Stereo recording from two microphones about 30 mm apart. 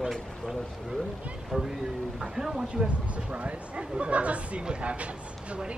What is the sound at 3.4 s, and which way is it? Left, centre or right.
Speech, right.